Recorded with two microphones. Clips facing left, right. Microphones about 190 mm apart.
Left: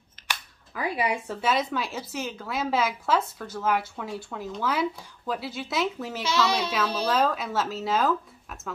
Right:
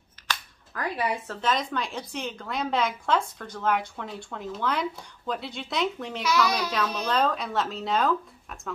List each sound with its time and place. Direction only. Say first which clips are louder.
0.3 s speech: right 1 dB; 10° left (ahead or behind)
6.2 s speech: even; 25° left (ahead or behind)
7.1 s speech: even; 5° left (ahead or behind)